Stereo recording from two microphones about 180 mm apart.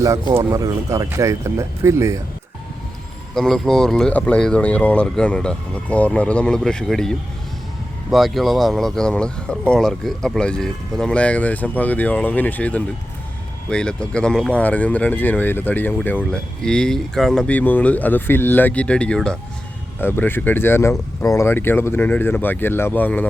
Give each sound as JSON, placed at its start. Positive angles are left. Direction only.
{"t": 0.0, "sound": "speech", "side_deg": -15}
{"t": 3.3, "sound": "speech", "side_deg": 5}